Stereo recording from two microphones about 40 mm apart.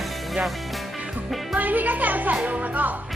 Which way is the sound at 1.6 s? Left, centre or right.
Right.